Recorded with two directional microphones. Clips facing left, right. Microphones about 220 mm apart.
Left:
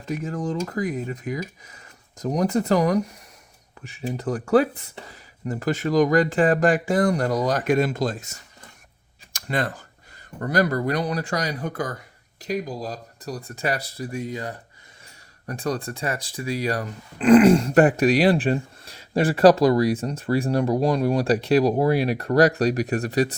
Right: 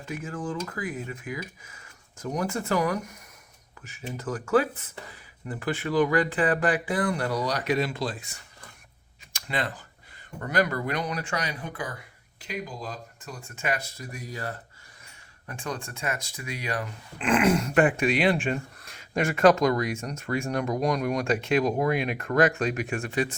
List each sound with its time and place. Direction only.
0.0 s speech: 40° left (ahead or behind); by 14.6 s 20° left (ahead or behind)
15.4 s speech: 40° left (ahead or behind)